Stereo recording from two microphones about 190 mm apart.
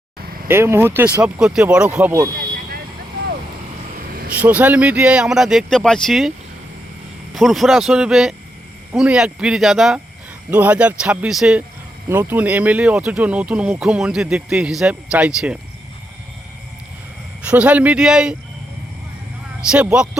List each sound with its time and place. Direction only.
0.4 s speech: 15° right (ahead or behind)
3.9 s vehicle: 50° right (ahead or behind)
4.4 s speech: 10° right (ahead or behind)
7.3 s speech: centre (ahead or behind)
17.4 s speech: 5° right (ahead or behind)
19.7 s speech: 5° right (ahead or behind)